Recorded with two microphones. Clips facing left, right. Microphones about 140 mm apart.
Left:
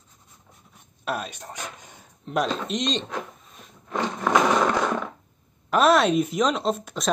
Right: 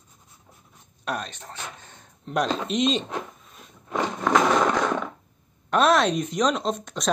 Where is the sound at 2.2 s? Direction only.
Centre (ahead or behind).